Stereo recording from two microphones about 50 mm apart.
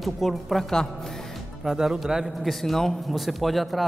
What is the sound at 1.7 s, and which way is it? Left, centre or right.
Speech, centre.